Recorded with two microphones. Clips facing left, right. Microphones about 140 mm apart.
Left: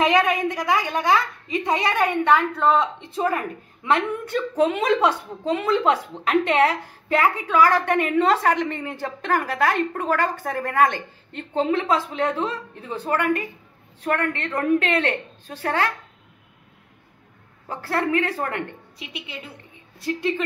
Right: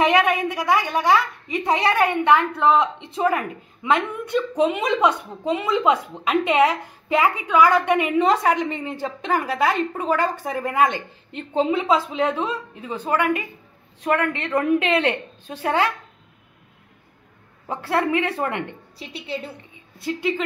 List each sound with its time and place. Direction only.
0.1 s a woman's voice: 10° right (ahead or behind)
17.8 s a woman's voice: 20° right (ahead or behind)
18.9 s a woman's voice: 35° right (ahead or behind)